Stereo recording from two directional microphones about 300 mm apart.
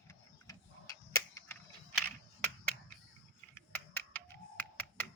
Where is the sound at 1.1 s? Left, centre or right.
Centre.